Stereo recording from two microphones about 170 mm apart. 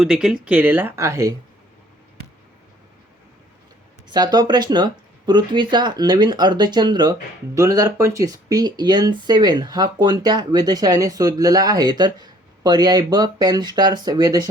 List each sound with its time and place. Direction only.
0.0 s speech: 5° right (ahead or behind); by 1.4 s 20° right (ahead or behind)
4.1 s speech: 25° right (ahead or behind)